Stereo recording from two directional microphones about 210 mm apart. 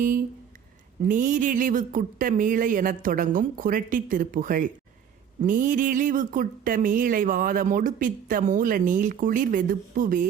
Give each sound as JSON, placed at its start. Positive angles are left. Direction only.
{"t": 1.0, "sound": "speech", "side_deg": -40}